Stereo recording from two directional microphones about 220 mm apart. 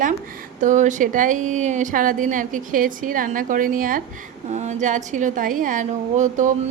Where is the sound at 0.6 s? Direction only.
35° right (ahead or behind).